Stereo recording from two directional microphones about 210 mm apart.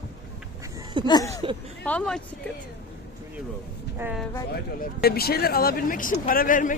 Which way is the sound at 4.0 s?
5° right (ahead or behind).